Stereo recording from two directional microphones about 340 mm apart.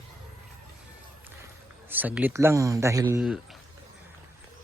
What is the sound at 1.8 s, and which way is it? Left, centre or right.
Speech, centre.